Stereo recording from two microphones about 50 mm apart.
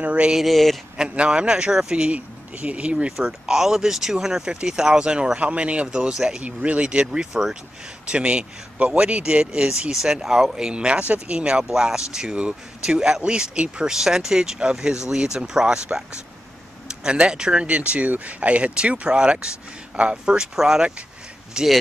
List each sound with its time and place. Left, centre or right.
0.0 s speech: right
0.3 s speech: centre
0.9 s speech: right
2.1 s speech: right
3.1 s speech: centre
7.1 s speech: centre
8.1 s speech: right